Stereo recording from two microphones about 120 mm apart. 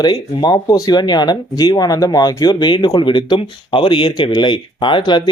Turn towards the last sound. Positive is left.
turn(degrees=40)  # may be behind; listen again after turning